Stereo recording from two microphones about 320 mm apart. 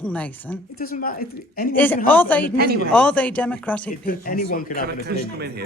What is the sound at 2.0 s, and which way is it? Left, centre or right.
Speech, centre.